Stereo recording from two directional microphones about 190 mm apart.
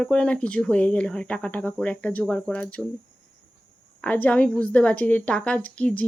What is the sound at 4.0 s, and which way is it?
Speech, 10° left (ahead or behind).